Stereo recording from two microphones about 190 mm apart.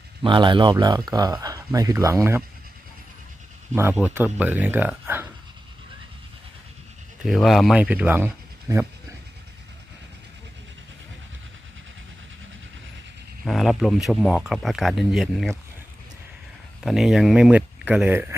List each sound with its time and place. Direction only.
0.2 s speech: 25° right (ahead or behind)
3.9 s speech: 10° right (ahead or behind)
7.2 s speech: centre (ahead or behind)
13.4 s speech: centre (ahead or behind)
16.8 s speech: centre (ahead or behind)